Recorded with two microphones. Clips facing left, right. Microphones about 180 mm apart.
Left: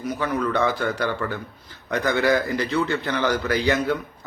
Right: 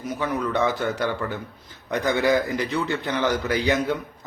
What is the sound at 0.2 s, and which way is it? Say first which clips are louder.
A man's voice: even; 20° right (ahead or behind).